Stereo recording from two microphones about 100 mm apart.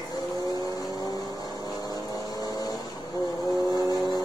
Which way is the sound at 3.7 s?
40° left (ahead or behind).